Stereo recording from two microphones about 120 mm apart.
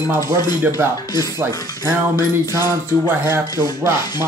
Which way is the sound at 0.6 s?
20° right (ahead or behind).